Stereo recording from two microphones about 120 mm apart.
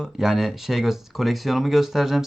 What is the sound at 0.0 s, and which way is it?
Speech, 5° right (ahead or behind).